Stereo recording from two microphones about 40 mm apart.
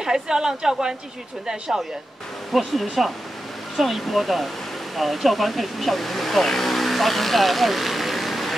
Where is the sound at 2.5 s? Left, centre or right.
Centre.